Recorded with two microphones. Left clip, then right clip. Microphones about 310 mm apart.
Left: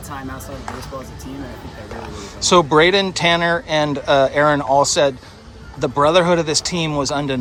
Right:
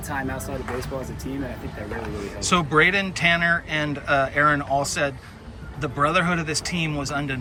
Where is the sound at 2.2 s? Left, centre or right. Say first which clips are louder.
Left 9 dB; centre.